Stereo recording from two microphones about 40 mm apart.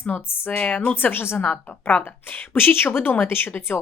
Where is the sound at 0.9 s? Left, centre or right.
Left.